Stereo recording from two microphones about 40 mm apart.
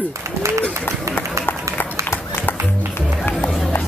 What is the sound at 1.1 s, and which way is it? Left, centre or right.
Run, left.